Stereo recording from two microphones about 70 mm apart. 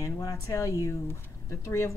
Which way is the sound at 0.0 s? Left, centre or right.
Left.